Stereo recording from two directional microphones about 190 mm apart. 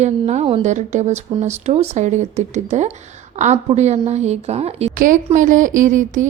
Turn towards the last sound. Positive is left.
turn(degrees=-40)  # may be behind; listen again after turning